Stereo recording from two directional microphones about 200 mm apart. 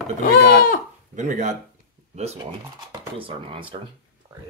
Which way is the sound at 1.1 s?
40° right (ahead or behind).